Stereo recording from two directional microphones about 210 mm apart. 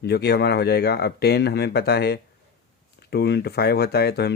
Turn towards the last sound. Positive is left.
turn(degrees=50)  # may be behind; listen again after turning